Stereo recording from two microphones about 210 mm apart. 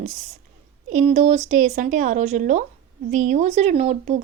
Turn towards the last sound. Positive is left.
turn(degrees=-30)  # may be behind; listen again after turning